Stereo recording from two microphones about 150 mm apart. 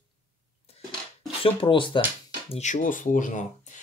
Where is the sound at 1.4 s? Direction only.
35° left (ahead or behind).